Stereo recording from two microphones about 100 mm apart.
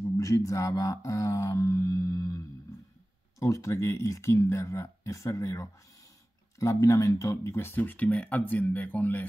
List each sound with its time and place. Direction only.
0.0 s speech: 35° left (ahead or behind); by 9.2 s 20° left (ahead or behind)